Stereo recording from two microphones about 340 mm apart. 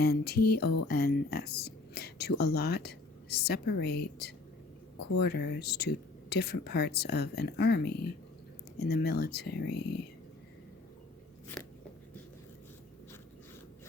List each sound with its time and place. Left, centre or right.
0.0 s a woman's voice: left